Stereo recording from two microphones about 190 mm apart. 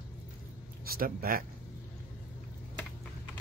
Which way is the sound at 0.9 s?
50° right (ahead or behind).